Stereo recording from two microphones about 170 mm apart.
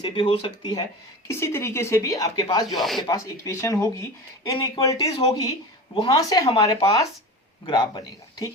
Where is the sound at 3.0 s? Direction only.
25° left (ahead or behind).